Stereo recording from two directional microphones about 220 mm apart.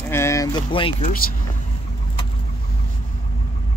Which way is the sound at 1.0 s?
40° left (ahead or behind).